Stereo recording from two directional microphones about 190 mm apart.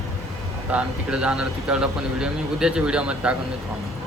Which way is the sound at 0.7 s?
5° right (ahead or behind).